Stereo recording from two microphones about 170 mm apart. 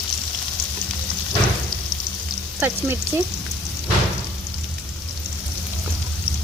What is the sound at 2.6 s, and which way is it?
Speech, 15° right (ahead or behind).